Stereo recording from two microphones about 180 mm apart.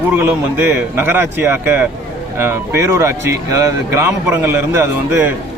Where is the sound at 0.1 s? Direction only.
10° right (ahead or behind).